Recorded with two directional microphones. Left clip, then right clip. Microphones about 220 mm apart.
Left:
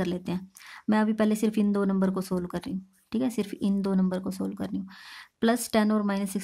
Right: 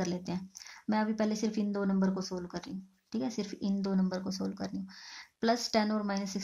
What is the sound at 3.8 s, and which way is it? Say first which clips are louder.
Speech: left 5 dB; 35° left (ahead or behind).